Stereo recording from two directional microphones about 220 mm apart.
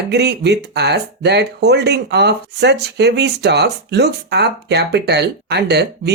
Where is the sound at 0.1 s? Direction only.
50° right (ahead or behind).